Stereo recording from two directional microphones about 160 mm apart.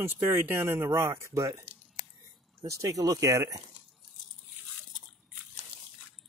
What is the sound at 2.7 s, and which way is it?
Speech, 20° right (ahead or behind).